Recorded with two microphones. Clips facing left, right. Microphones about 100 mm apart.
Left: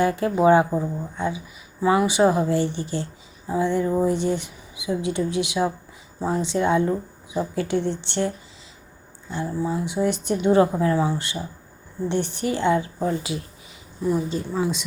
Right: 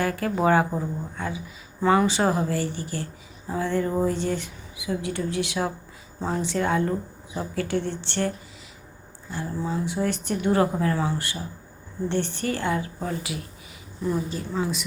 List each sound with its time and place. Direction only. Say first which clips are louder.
0.0 s a woman's voice: left 5 dB; 20° left (ahead or behind)
9.3 s a woman's voice: left 3 dB; 20° left (ahead or behind)